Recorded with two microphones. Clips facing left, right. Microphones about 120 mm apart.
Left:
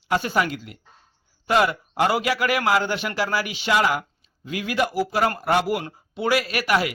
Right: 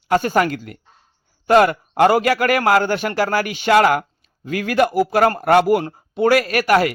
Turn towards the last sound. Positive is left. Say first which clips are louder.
# right 6 dB
turn(degrees=-50)  # may be behind; listen again after turning